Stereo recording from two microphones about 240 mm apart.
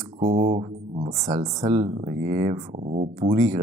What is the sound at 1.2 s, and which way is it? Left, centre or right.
Speech, centre.